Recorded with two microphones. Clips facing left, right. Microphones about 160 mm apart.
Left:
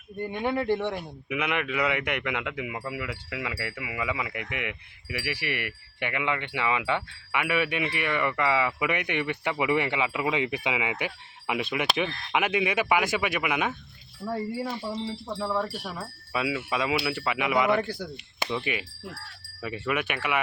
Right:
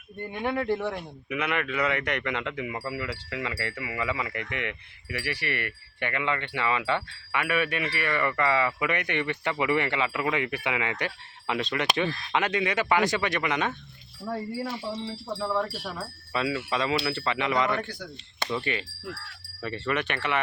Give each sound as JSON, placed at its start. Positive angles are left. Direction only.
{"t": 0.3, "sound": "speech", "side_deg": 0}
{"t": 1.3, "sound": "speech", "side_deg": 15}
{"t": 14.2, "sound": "speech", "side_deg": -15}
{"t": 15.4, "sound": "speech", "side_deg": 0}